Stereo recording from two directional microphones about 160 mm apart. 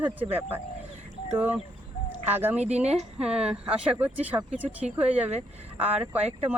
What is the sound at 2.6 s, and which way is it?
Speech, 45° right (ahead or behind).